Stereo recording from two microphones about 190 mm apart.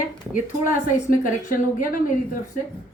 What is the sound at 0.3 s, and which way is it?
Speech, 45° left (ahead or behind).